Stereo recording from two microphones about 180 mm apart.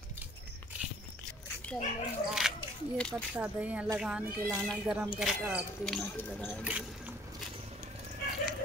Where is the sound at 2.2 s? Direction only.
5° right (ahead or behind).